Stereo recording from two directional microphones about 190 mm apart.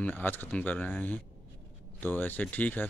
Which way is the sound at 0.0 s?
10° left (ahead or behind).